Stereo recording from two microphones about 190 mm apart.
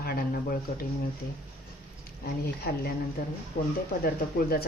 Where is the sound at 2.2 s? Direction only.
55° left (ahead or behind).